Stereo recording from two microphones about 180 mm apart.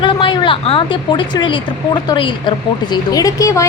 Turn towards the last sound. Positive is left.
turn(degrees=15)  # may be behind; listen again after turning